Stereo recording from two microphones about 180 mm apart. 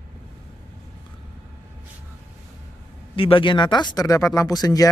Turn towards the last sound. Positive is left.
turn(degrees=20)  # may be behind; listen again after turning